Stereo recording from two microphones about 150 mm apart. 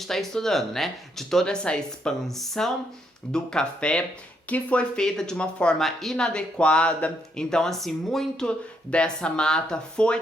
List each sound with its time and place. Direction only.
0.0 s speech: centre (ahead or behind)